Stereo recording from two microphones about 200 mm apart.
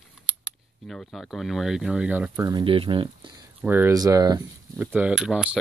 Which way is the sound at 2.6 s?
25° right (ahead or behind).